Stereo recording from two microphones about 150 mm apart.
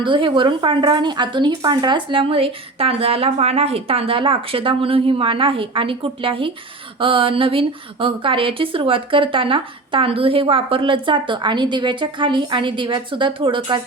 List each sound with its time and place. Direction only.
0.0 s speech: 35° right (ahead or behind)